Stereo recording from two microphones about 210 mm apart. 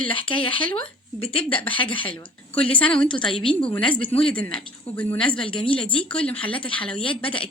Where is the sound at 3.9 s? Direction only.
25° left (ahead or behind).